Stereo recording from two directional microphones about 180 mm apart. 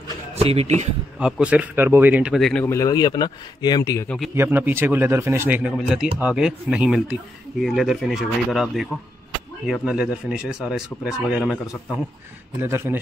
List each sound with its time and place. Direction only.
0.4 s a man's voice: 35° right (ahead or behind)
1.2 s a man's voice: 5° right (ahead or behind)
2.6 s a man's voice: 15° left (ahead or behind)
4.4 s a man's voice: 10° right (ahead or behind)
12.5 s a man's voice: 10° right (ahead or behind)